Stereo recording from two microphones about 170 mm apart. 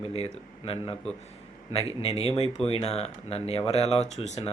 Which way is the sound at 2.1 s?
35° left (ahead or behind).